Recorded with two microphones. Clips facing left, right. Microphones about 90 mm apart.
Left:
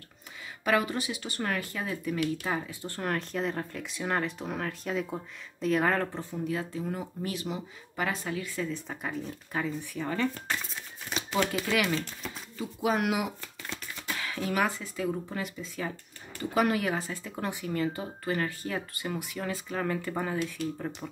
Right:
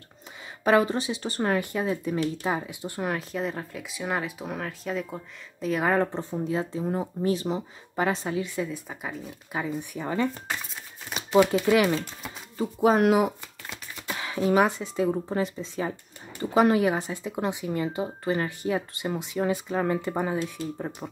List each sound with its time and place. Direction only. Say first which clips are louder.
0.7 s speech: right 6 dB; 30° right (ahead or behind); by 5.9 s 5° right (ahead or behind)
6.3 s speech: right 2 dB; 25° right (ahead or behind)
11.1 s typewriter: right 9 dB; 5° right (ahead or behind)
12.5 s speech: right 7 dB; 40° right (ahead or behind)
13.4 s a sound: even; 20° right (ahead or behind)
15.0 s speech: right 4 dB; 30° right (ahead or behind)